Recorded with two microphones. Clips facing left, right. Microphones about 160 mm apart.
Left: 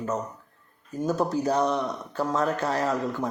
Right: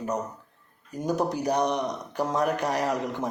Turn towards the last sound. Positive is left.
turn(degrees=-20)  # may be behind; listen again after turning